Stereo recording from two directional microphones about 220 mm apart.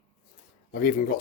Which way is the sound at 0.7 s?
40° left (ahead or behind).